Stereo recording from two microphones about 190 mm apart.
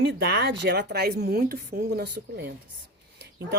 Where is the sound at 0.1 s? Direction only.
65° right (ahead or behind).